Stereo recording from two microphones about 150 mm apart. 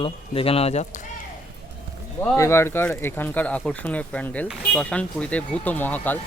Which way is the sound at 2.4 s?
15° left (ahead or behind).